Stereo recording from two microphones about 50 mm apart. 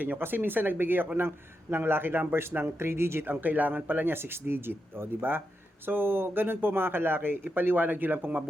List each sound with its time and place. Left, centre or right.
0.2 s speech: right
3.4 s speech: right